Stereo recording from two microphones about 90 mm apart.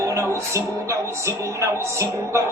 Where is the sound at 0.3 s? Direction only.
35° right (ahead or behind).